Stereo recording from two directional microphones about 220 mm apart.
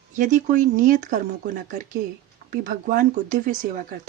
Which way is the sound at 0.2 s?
35° right (ahead or behind).